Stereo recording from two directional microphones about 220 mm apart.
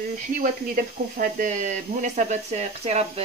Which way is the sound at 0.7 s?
40° right (ahead or behind).